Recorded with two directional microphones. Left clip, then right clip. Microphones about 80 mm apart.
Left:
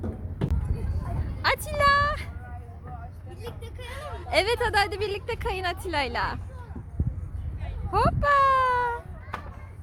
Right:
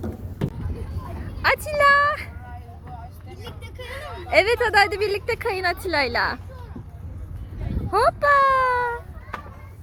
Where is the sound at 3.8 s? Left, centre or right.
Centre; by 5.0 s right.